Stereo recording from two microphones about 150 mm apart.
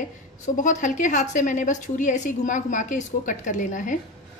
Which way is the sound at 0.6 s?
60° left (ahead or behind).